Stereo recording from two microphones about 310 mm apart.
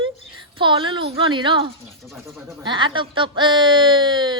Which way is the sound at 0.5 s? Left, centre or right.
Centre.